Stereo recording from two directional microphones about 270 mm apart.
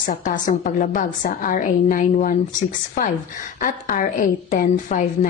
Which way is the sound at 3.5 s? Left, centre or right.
Left.